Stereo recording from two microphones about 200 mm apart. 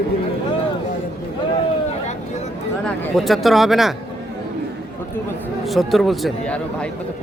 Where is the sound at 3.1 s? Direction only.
Centre (ahead or behind).